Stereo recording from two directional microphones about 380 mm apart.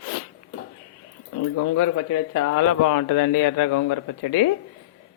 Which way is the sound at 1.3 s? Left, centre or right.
Left.